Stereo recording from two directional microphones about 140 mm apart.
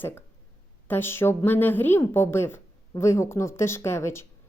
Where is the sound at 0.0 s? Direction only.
15° left (ahead or behind).